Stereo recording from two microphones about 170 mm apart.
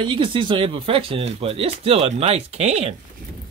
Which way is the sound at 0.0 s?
30° right (ahead or behind).